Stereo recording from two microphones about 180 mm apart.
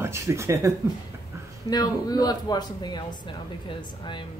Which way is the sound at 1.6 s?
20° left (ahead or behind).